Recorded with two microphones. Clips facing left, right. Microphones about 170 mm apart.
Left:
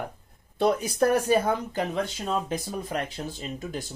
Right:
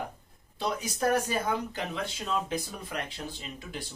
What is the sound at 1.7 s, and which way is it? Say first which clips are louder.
Speech: left 6 dB; 40° left (ahead or behind).